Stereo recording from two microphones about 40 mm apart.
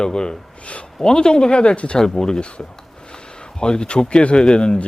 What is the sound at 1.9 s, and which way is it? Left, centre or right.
Speech, centre.